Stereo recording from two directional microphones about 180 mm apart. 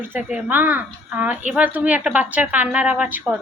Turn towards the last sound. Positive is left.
turn(degrees=-10)  # may be behind; listen again after turning